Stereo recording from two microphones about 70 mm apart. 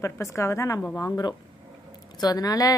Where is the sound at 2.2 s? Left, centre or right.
Left.